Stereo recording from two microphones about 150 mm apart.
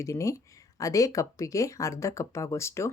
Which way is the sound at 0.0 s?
20° left (ahead or behind).